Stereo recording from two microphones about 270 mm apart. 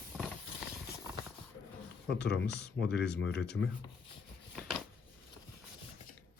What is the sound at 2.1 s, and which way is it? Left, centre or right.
Speech, left.